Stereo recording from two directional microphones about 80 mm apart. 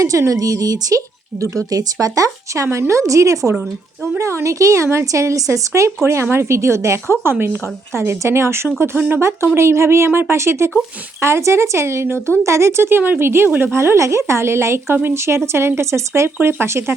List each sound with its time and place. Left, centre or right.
0.0 s speech: right
9.6 s speech: right